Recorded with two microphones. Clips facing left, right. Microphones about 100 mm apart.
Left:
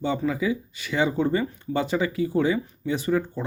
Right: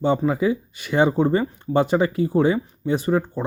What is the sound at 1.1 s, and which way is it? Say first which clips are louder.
Speech: right 4 dB; 40° right (ahead or behind).